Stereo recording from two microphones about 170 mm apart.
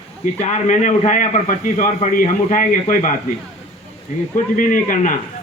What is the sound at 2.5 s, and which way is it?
Speech, 50° left (ahead or behind).